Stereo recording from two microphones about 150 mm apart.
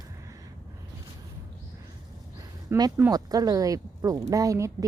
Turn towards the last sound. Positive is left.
turn(degrees=-20)  # may be behind; listen again after turning